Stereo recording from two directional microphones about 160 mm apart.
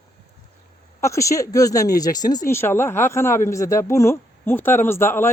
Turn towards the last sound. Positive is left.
turn(degrees=15)  # may be behind; listen again after turning